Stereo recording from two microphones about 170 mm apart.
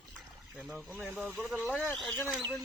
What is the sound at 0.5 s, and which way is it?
Speech, centre (ahead or behind).